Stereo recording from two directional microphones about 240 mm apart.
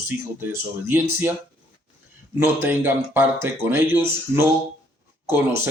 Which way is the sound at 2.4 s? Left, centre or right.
Centre.